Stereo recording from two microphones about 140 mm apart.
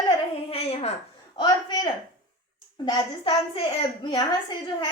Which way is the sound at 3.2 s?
45° left (ahead or behind).